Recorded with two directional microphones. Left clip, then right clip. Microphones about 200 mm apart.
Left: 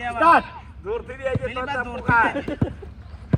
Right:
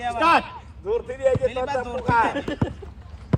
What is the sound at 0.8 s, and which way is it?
Speech, 45° right (ahead or behind).